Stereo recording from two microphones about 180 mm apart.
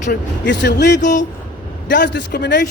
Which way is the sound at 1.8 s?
80° left.